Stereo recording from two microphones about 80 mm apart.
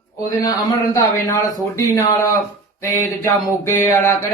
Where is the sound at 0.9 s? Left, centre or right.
Left.